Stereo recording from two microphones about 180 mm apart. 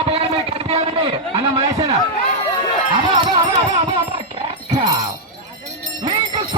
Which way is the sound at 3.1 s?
25° right (ahead or behind).